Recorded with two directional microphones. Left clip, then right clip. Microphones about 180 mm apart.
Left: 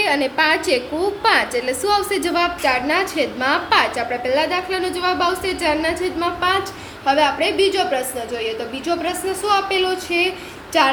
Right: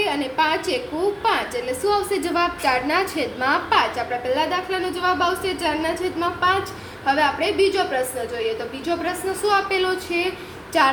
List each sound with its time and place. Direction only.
0.0 s a woman's voice: 35° left (ahead or behind)